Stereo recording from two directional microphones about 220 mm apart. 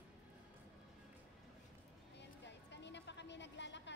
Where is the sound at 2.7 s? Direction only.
55° left (ahead or behind).